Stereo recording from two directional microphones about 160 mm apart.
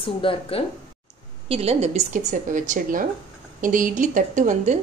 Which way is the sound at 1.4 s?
40° right (ahead or behind).